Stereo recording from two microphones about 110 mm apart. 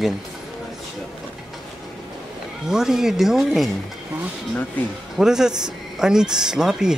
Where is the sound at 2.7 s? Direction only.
5° right (ahead or behind).